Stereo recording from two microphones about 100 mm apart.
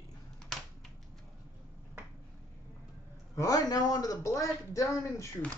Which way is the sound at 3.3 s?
35° left (ahead or behind).